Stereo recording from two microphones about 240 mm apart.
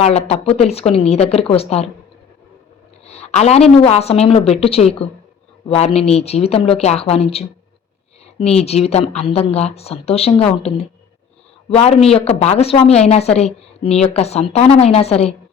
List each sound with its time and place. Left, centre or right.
0.0 s a woman's voice: left
3.1 s a woman's voice: left